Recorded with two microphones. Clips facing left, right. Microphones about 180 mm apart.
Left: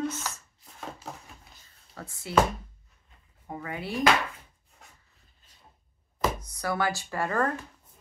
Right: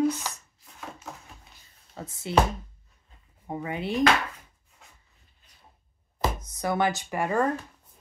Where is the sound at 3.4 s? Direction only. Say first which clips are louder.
Right 4 dB; 20° right (ahead or behind).